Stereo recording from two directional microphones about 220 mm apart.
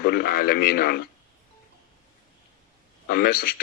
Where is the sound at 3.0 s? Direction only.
45° left (ahead or behind).